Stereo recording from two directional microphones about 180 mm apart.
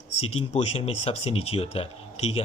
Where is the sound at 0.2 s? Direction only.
35° left (ahead or behind).